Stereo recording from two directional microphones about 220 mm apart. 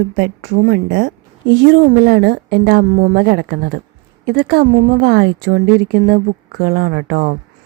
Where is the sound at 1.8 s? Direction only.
40° right (ahead or behind).